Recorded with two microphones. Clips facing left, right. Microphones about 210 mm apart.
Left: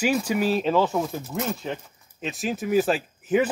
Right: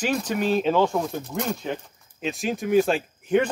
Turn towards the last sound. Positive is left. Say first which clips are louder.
# even
turn(degrees=5)  # may be behind; listen again after turning